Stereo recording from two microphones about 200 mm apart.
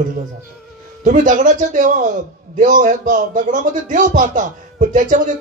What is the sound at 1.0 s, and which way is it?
A man's voice, 40° right (ahead or behind).